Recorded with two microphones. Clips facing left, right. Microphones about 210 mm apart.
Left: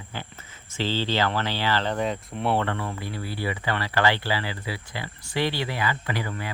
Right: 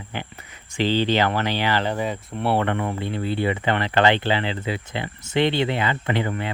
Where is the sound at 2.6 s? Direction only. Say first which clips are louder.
Right 5 dB; 20° right (ahead or behind).